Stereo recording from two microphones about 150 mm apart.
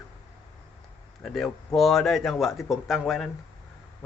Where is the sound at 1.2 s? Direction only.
Centre (ahead or behind).